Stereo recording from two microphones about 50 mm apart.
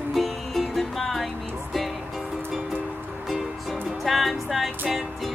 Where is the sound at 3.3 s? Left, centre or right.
Centre.